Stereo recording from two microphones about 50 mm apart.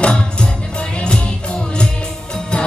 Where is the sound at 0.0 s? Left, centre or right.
Centre.